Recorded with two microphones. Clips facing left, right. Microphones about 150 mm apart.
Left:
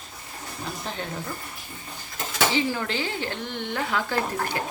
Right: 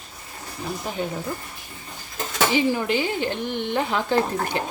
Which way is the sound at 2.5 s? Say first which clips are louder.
Right 5 dB; 15° right (ahead or behind).